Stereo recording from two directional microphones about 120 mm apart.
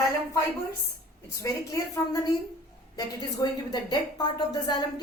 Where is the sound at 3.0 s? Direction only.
35° left (ahead or behind).